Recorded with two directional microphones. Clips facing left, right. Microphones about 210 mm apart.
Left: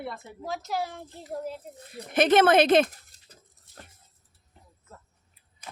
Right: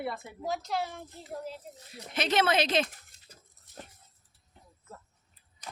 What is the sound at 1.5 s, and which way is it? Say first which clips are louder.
Speech: left 5 dB; 55° left (ahead or behind).